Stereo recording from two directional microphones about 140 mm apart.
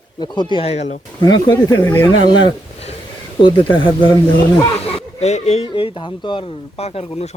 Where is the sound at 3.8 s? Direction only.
35° left (ahead or behind).